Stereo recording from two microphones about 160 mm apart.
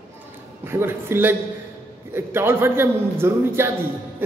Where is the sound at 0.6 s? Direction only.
15° right (ahead or behind).